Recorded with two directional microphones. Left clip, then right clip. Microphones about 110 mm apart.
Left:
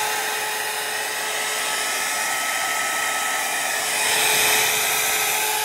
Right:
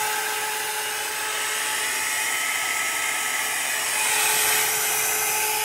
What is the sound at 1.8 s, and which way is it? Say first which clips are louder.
Hair dryer: left 2 dB; 90° left.